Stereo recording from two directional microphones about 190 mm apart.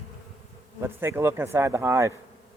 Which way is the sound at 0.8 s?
15° right (ahead or behind).